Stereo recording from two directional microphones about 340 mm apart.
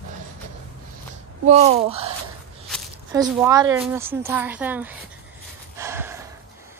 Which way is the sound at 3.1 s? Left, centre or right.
Centre.